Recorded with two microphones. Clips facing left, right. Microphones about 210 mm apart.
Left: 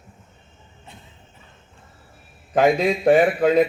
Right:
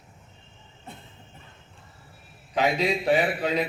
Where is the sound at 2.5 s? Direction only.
50° left (ahead or behind).